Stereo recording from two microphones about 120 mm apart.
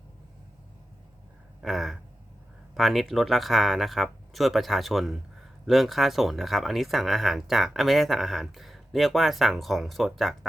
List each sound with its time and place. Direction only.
1.6 s speech: centre (ahead or behind)